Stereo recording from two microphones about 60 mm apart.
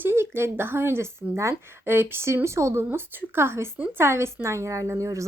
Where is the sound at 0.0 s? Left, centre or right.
Right.